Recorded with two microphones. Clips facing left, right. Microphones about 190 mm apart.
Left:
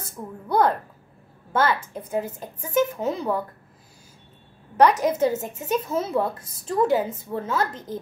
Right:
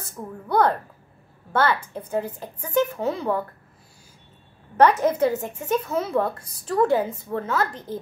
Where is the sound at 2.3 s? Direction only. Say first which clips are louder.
Left 1 dB; 20° left (ahead or behind).